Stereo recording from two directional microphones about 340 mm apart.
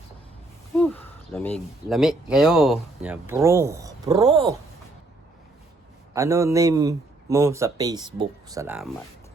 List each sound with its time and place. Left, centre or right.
0.8 s speech: centre
6.1 s speech: centre